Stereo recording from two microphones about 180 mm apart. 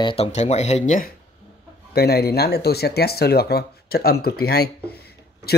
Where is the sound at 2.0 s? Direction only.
60° left (ahead or behind).